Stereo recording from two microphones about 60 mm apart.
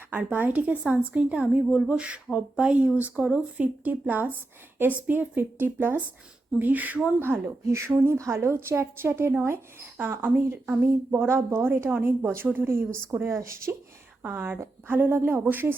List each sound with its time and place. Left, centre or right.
0.1 s speech: right
7.3 s a woman's voice: right
10.0 s speech: right
13.2 s a woman's voice: right
14.2 s a woman's voice: right